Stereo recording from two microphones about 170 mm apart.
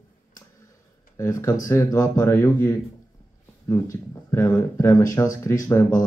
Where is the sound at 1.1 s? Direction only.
15° left (ahead or behind).